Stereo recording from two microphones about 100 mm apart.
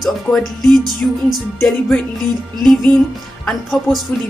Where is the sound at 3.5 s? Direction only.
Centre (ahead or behind).